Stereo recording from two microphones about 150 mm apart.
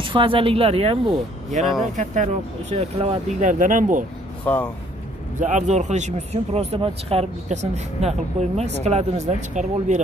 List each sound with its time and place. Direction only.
0.0 s speech: 35° right (ahead or behind)
3.3 s speech: 60° right (ahead or behind)
4.5 s speech: 10° left (ahead or behind)
5.4 s speech: 55° right (ahead or behind)